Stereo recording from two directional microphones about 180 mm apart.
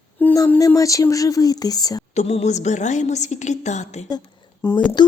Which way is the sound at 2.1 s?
35° left (ahead or behind).